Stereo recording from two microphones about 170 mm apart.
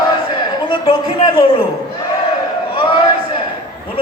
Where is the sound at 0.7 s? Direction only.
30° left (ahead or behind).